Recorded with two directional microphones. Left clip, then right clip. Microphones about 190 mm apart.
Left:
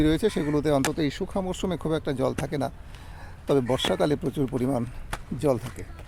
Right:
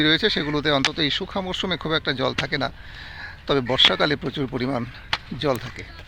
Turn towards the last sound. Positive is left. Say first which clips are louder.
# right 2 dB
turn(degrees=10)  # may be behind; listen again after turning